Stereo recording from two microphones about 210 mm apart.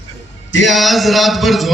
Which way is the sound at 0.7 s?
Centre (ahead or behind).